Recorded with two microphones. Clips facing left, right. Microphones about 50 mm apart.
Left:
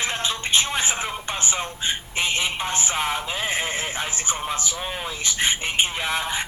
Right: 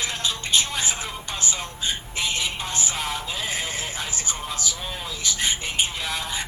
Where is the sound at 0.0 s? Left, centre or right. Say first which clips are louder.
Left 2 dB; left.